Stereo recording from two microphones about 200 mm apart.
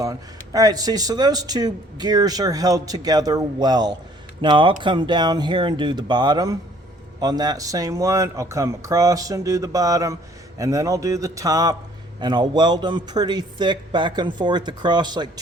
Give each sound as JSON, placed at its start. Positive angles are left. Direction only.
{"t": 0.5, "sound": "speech", "side_deg": -20}